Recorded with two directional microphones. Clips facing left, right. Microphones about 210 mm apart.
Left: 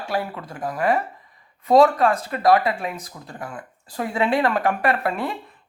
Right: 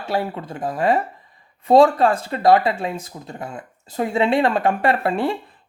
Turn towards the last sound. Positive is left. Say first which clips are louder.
# right 3 dB
turn(degrees=-30)  # may be behind; listen again after turning